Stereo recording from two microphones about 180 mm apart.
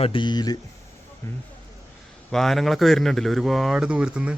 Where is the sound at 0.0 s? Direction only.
30° left (ahead or behind).